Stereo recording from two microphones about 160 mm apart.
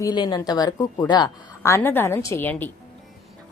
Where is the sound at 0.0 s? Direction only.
25° left (ahead or behind).